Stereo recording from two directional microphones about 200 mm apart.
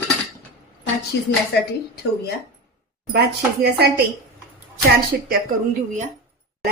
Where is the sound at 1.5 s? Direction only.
55° left (ahead or behind).